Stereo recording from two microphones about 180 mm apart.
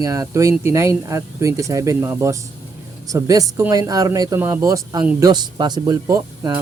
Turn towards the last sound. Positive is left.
turn(degrees=-15)  # may be behind; listen again after turning